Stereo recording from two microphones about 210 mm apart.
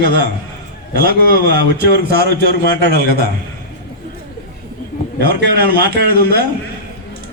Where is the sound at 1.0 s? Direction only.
50° right (ahead or behind).